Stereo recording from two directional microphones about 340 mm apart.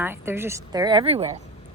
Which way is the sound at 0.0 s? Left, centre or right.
Centre.